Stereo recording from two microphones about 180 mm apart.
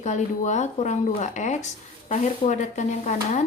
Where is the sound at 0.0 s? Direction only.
40° left (ahead or behind).